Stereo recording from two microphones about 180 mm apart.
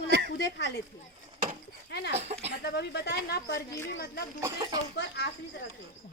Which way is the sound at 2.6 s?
65° left (ahead or behind).